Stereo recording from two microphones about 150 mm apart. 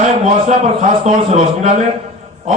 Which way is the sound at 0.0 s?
50° right (ahead or behind).